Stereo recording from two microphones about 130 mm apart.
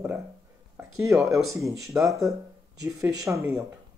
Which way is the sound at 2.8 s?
30° right (ahead or behind).